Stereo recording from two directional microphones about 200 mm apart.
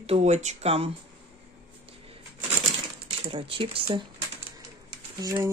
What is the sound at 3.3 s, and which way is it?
Speech, 25° right (ahead or behind).